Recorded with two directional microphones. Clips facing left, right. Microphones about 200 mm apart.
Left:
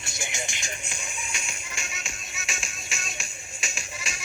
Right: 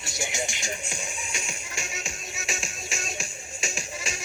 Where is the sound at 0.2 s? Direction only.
40° right (ahead or behind).